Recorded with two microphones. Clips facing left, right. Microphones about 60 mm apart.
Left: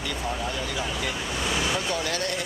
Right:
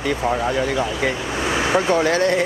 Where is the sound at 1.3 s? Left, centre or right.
Right.